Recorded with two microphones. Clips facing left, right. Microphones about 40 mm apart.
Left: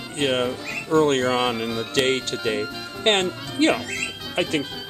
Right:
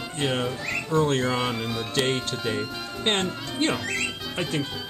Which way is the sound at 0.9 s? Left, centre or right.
Left.